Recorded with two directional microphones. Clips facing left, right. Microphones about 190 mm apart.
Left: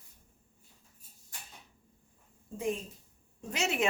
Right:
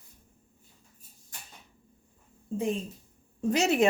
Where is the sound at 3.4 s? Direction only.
40° right (ahead or behind).